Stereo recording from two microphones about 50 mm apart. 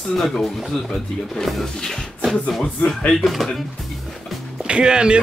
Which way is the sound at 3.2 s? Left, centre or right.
Centre.